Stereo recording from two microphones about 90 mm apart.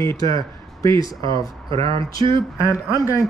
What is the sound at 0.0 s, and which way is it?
Speech, 35° left (ahead or behind).